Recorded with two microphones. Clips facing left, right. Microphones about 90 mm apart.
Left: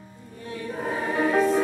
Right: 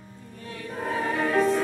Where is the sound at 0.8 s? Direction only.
5° left (ahead or behind).